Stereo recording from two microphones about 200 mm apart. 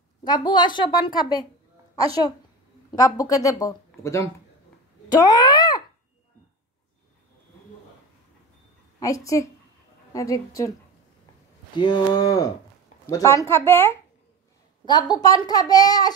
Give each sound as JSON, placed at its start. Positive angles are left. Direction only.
{"t": 0.2, "sound": "a woman's voice", "side_deg": 20}
{"t": 2.9, "sound": "speech", "side_deg": 15}
{"t": 9.0, "sound": "speech", "side_deg": 15}
{"t": 11.7, "sound": "a woman's voice", "side_deg": 20}